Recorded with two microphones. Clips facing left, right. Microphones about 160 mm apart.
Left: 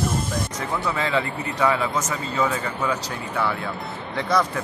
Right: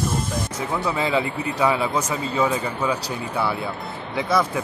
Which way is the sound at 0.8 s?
15° right (ahead or behind).